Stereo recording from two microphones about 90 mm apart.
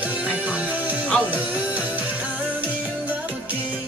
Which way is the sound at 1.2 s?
15° right (ahead or behind).